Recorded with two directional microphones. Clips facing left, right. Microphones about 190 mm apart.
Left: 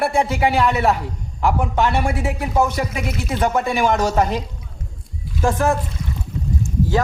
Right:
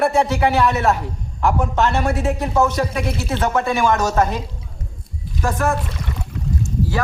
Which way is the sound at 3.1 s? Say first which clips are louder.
Right 2 dB; 30° right (ahead or behind).